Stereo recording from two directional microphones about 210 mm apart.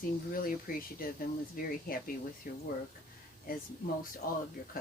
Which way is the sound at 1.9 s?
45° left (ahead or behind).